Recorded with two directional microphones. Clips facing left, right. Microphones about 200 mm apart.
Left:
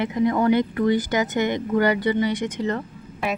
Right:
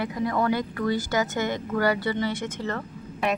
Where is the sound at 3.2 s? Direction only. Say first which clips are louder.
Even; centre (ahead or behind).